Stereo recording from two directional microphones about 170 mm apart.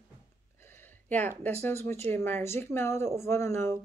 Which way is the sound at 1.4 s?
15° left (ahead or behind).